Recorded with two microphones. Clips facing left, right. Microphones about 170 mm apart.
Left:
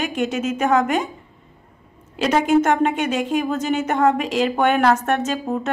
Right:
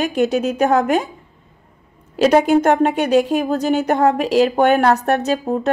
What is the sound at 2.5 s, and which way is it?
A woman's voice, 35° right (ahead or behind).